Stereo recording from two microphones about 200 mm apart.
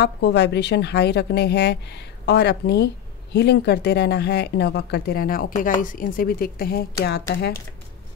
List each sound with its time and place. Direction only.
0.0 s speech: 55° left (ahead or behind)